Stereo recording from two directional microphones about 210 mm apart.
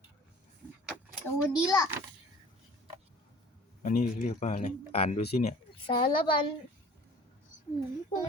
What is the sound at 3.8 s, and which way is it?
A child's voice, 40° left (ahead or behind).